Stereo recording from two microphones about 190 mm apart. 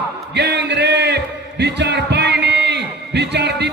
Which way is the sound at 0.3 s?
65° right (ahead or behind).